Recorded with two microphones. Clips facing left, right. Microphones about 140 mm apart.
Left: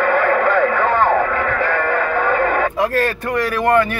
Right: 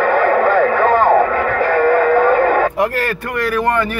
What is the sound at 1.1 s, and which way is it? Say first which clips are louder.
Radio: right 4 dB; 20° right (ahead or behind).